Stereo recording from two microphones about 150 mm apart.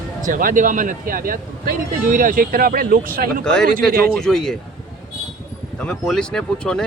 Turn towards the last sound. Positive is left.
turn(degrees=5)  # may be behind; listen again after turning